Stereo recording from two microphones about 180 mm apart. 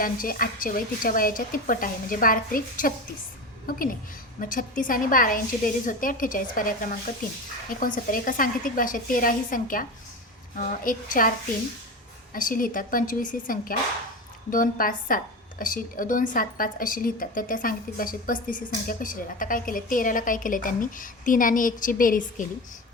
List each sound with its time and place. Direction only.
0.0 s a woman's voice: 50° left (ahead or behind)
7.9 s speech: 50° left (ahead or behind)
12.3 s speech: 50° left (ahead or behind)